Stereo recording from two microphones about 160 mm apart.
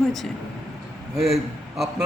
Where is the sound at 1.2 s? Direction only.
Centre (ahead or behind).